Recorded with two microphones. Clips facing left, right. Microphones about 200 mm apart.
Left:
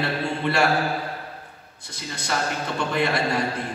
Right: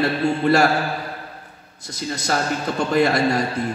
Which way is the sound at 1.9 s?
40° right (ahead or behind).